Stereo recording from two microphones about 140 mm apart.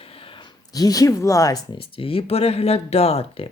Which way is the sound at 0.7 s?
25° left (ahead or behind).